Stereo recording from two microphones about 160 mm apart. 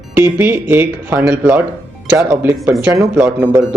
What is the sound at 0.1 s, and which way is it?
Speech, 15° right (ahead or behind).